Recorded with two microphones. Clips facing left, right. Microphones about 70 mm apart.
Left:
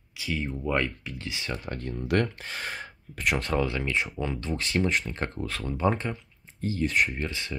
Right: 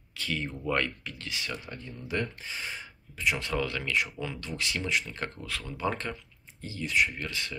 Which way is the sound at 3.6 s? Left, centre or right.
Left.